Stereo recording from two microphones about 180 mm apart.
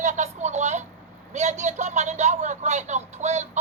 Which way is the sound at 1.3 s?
40° right (ahead or behind).